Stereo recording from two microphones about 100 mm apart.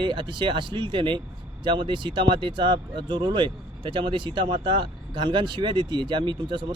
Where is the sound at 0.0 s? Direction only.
55° right (ahead or behind).